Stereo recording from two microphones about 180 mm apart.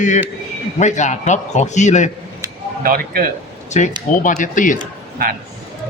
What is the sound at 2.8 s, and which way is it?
Speech, 55° right (ahead or behind).